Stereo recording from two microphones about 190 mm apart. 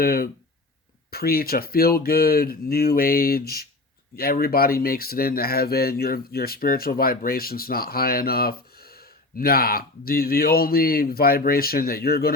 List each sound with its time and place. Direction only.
0.0 s speech: 50° left (ahead or behind)